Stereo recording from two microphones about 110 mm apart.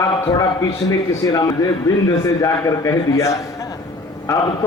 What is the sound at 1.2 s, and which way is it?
A man's voice, 35° left (ahead or behind).